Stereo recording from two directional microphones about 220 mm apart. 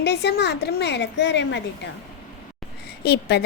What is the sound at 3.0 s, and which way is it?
Speech, 50° left (ahead or behind).